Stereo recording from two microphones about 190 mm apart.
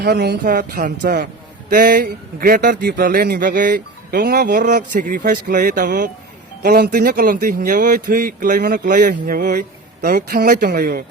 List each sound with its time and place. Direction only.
0.0 s speech: 55° right (ahead or behind)